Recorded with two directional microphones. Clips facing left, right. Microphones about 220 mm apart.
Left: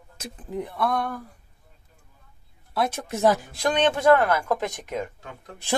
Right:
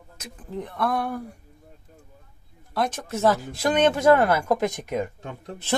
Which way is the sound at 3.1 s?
15° left (ahead or behind).